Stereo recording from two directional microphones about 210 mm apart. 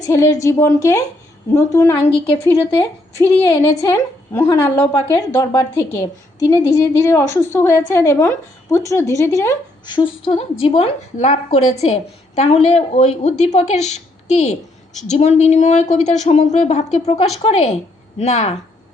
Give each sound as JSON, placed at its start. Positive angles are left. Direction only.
{"t": 0.0, "sound": "a woman's voice", "side_deg": 15}
{"t": 2.0, "sound": "a woman's voice", "side_deg": 25}
{"t": 3.2, "sound": "a woman's voice", "side_deg": 10}